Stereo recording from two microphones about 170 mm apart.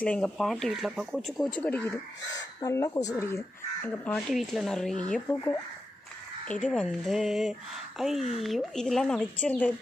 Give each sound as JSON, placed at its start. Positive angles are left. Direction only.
{"t": 0.0, "sound": "speech", "side_deg": 5}
{"t": 4.3, "sound": "speech", "side_deg": 0}